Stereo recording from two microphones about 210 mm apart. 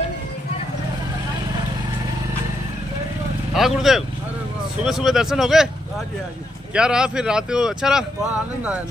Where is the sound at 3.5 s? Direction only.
Centre (ahead or behind).